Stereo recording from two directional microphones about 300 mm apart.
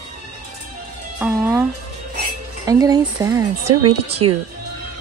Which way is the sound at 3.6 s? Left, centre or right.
Right.